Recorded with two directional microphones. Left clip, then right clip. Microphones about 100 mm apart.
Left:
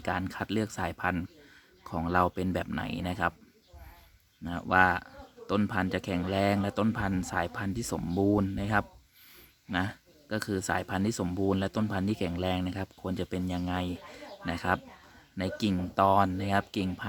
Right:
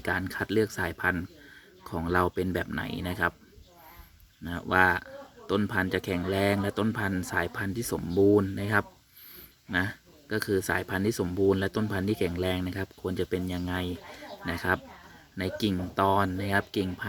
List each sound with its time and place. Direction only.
0.0 s speech: 40° left (ahead or behind)
4.4 s speech: 40° left (ahead or behind)